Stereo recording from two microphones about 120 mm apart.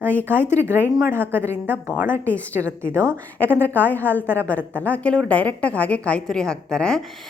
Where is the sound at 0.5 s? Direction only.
20° right (ahead or behind).